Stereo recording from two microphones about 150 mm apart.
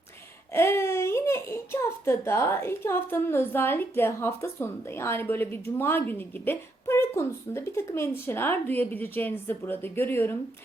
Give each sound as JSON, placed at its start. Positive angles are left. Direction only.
{"t": 0.5, "sound": "a child's voice", "side_deg": 15}